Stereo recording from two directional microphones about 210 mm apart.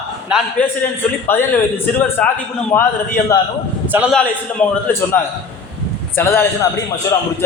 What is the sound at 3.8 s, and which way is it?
Speech, 5° right (ahead or behind).